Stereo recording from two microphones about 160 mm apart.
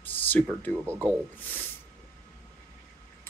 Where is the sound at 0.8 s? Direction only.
15° right (ahead or behind).